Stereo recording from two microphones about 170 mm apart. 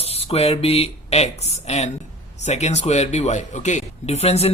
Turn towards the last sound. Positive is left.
turn(degrees=35)  # may be behind; listen again after turning